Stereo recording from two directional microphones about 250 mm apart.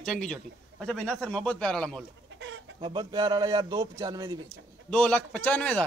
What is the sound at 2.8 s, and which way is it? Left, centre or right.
Speech, centre.